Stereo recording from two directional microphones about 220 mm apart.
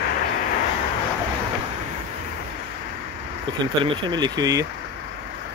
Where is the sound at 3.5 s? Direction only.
20° right (ahead or behind).